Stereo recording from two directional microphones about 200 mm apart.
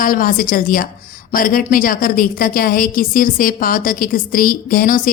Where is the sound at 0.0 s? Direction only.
45° left (ahead or behind).